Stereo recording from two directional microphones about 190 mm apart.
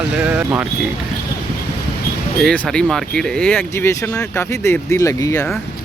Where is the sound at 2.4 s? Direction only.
5° left (ahead or behind).